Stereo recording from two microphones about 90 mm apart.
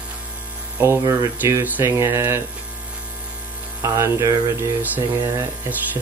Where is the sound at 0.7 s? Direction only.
20° right (ahead or behind).